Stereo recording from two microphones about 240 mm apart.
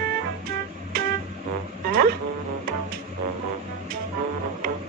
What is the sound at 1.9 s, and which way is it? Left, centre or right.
Music, right.